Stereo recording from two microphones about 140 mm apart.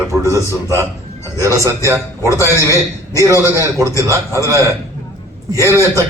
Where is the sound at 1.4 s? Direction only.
20° right (ahead or behind).